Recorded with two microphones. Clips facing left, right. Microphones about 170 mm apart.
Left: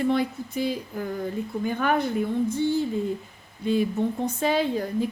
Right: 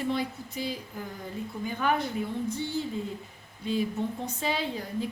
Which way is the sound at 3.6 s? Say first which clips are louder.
Left 6 dB; 55° left (ahead or behind).